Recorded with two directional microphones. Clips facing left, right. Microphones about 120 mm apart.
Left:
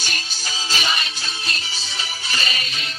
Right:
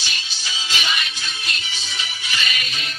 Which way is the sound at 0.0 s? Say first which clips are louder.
Left 2 dB; 45° left (ahead or behind).